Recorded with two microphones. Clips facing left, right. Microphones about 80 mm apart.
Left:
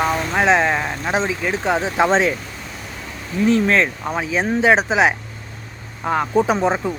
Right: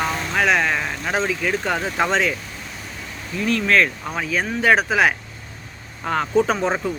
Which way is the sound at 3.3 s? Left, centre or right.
Left.